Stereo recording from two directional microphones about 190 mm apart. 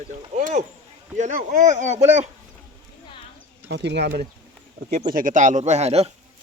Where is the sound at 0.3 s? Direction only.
35° right (ahead or behind).